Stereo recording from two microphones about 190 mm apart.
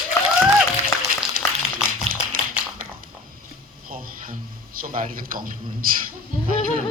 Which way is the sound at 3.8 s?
50° right (ahead or behind).